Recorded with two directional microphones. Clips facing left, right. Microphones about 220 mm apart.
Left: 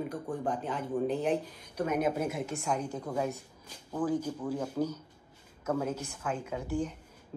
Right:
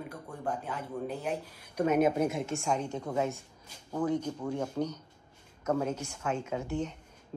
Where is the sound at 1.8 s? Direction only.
25° right (ahead or behind).